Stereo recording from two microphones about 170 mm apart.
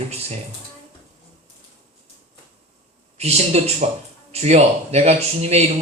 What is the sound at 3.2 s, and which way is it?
A man's voice, 40° right (ahead or behind).